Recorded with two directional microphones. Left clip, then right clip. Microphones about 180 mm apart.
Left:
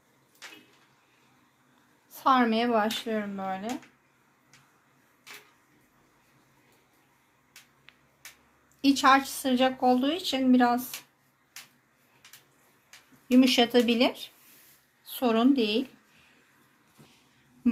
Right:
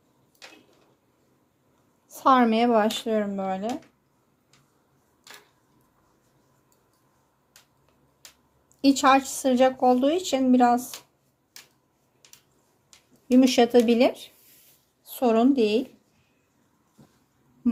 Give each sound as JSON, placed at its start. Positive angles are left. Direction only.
{"t": 2.1, "sound": "speech", "side_deg": -55}
{"t": 8.8, "sound": "speech", "side_deg": -45}
{"t": 13.2, "sound": "a woman's voice", "side_deg": -40}